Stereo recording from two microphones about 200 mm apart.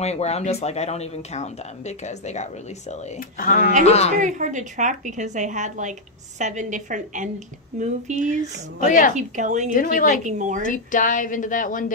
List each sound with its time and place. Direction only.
0.0 s speech: 35° left (ahead or behind)
3.8 s speech: 30° left (ahead or behind)
4.2 s a woman's voice: 40° right (ahead or behind)
8.7 s speech: 40° left (ahead or behind)
9.1 s a woman's voice: 40° right (ahead or behind)
9.7 s a woman's voice: 40° left (ahead or behind)
10.2 s a woman's voice: 40° right (ahead or behind)
10.7 s speech: 40° left (ahead or behind)